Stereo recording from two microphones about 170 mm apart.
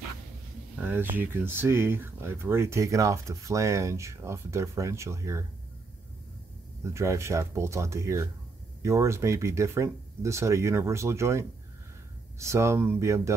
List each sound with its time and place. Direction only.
0.7 s speech: 10° right (ahead or behind)
6.8 s speech: 15° right (ahead or behind)